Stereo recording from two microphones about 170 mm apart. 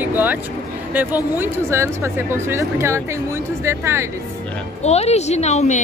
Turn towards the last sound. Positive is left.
turn(degrees=40)  # may be behind; listen again after turning